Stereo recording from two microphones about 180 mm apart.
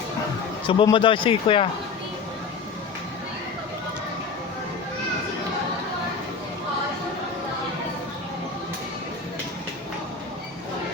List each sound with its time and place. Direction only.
0.7 s a man's voice: 30° left (ahead or behind)